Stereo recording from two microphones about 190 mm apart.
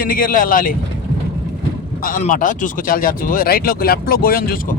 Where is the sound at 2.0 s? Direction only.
45° left (ahead or behind).